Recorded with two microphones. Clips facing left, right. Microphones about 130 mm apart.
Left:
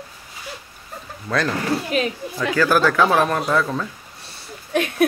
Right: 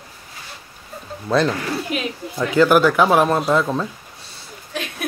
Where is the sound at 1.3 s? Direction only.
20° right (ahead or behind).